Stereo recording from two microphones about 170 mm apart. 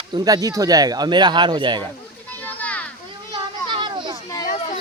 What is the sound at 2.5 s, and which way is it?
Children playing, 10° left (ahead or behind).